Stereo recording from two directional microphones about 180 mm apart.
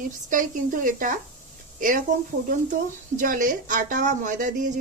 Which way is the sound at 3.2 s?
50° right (ahead or behind).